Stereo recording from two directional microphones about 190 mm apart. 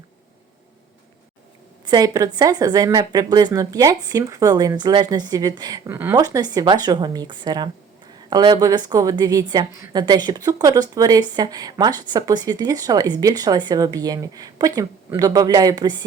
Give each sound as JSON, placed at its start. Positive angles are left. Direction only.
{"t": 1.8, "sound": "a woman's voice", "side_deg": -20}